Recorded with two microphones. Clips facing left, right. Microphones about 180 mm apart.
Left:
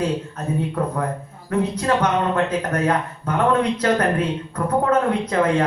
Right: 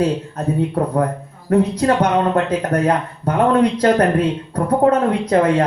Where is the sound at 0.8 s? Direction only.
35° right (ahead or behind).